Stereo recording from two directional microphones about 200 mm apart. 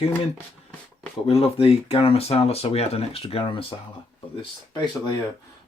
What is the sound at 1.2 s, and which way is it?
Speech, 30° left (ahead or behind).